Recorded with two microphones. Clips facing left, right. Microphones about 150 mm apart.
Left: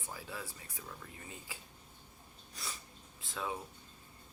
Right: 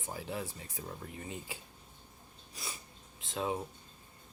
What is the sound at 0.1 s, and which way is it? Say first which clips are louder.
Speech: right 6 dB; 25° right (ahead or behind).